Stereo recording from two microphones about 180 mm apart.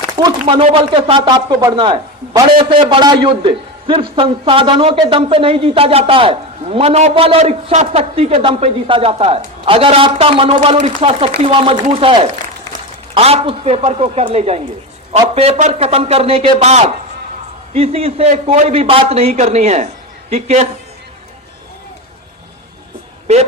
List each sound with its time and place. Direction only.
0.2 s a man's voice: 25° right (ahead or behind); by 20.7 s 40° right (ahead or behind)
23.2 s a man's voice: 35° right (ahead or behind)